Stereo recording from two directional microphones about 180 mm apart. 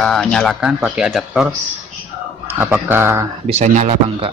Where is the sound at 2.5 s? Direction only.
10° right (ahead or behind).